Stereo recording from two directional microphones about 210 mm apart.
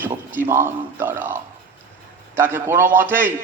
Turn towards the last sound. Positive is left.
turn(degrees=-10)  # may be behind; listen again after turning